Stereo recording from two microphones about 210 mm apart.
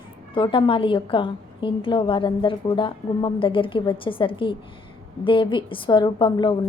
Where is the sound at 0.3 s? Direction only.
25° left (ahead or behind).